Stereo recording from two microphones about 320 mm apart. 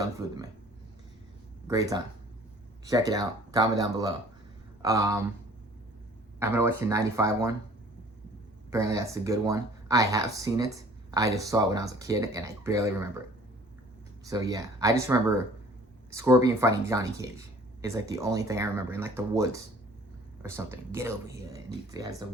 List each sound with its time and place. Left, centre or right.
0.0 s a sound: centre
1.6 s speech: centre
6.4 s speech: centre
8.7 s speech: centre
14.3 s speech: centre